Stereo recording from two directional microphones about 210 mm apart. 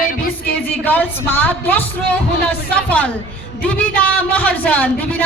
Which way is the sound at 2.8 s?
5° left (ahead or behind).